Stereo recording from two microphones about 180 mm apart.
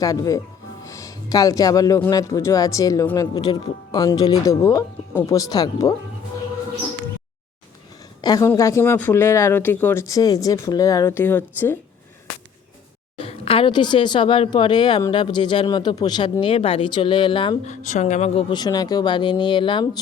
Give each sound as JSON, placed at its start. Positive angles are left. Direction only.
{"t": 0.0, "sound": "a woman's voice", "side_deg": 20}
{"t": 8.2, "sound": "a woman's voice", "side_deg": 20}
{"t": 13.1, "sound": "speech", "side_deg": 30}
{"t": 17.7, "sound": "speech", "side_deg": 40}